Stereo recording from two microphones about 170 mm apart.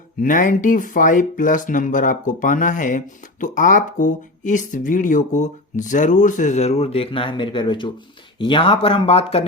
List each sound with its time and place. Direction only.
0.2 s speech: 50° left (ahead or behind); by 9.5 s 35° left (ahead or behind)